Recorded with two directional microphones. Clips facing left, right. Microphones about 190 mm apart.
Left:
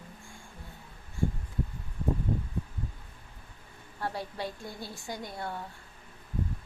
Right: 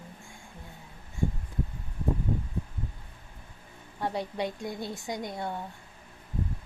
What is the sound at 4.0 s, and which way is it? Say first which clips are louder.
A woman's voice: right 4 dB; 20° right (ahead or behind).